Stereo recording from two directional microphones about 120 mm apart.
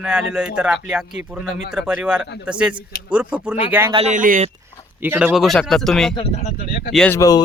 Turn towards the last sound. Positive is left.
turn(degrees=30)  # may be behind; listen again after turning